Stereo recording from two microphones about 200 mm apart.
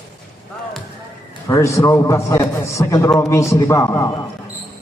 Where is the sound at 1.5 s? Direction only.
15° left (ahead or behind).